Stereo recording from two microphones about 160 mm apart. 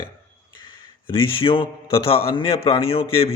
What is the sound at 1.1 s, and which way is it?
A man's voice, 35° left (ahead or behind).